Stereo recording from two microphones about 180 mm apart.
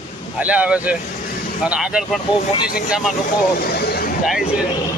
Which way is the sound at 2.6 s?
60° left (ahead or behind).